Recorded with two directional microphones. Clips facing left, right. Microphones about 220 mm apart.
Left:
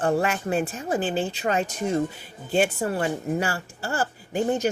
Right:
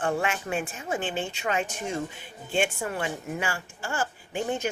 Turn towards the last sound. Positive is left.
turn(degrees=40)  # may be behind; listen again after turning